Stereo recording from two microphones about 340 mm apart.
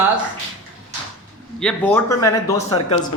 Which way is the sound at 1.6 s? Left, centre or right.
Centre.